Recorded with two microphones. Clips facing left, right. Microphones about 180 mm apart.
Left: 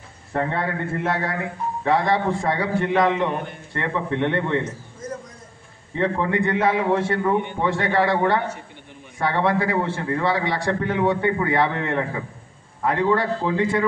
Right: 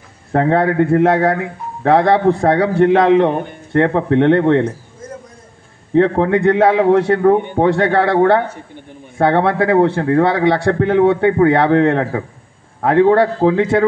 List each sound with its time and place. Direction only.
0.3 s speech: 70° right (ahead or behind)
5.9 s a man's voice: 80° right